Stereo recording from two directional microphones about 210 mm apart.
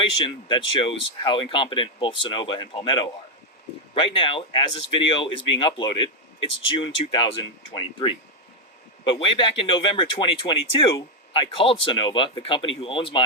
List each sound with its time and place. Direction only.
0.0 s speech: 25° left (ahead or behind)
9.0 s speech: 25° left (ahead or behind)